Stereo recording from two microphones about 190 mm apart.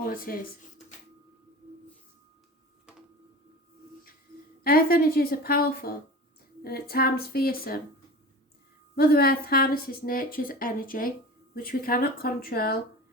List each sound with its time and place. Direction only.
0.0 s speech: 50° left (ahead or behind)
4.6 s speech: 50° left (ahead or behind)
9.0 s speech: 55° left (ahead or behind)